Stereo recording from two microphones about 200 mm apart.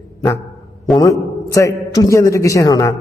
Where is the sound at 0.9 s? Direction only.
15° left (ahead or behind).